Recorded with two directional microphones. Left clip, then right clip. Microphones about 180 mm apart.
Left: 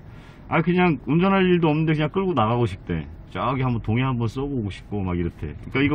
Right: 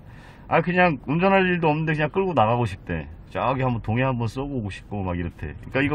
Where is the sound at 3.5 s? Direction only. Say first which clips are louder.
Right 1 dB; 35° right (ahead or behind).